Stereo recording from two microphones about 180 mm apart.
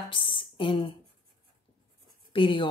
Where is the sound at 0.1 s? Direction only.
30° left (ahead or behind).